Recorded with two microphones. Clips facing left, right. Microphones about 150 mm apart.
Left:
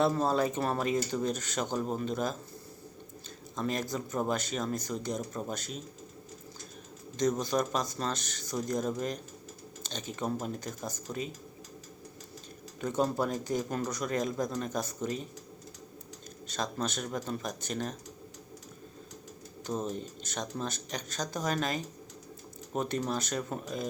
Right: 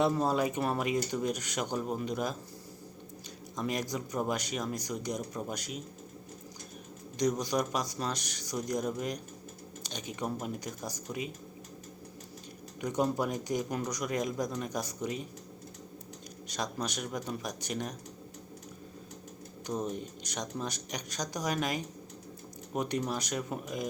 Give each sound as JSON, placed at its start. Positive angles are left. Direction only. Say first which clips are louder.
{"t": 0.0, "sound": "speech", "louder": "left 1 dB", "side_deg": -15}
{"t": 3.5, "sound": "speech", "louder": "left 1 dB", "side_deg": -15}
{"t": 7.2, "sound": "speech", "louder": "left 1 dB", "side_deg": -15}
{"t": 12.8, "sound": "speech", "louder": "left 1 dB", "side_deg": -15}
{"t": 16.5, "sound": "speech", "louder": "left 2 dB", "side_deg": -15}
{"t": 19.6, "sound": "speech", "louder": "even", "side_deg": -15}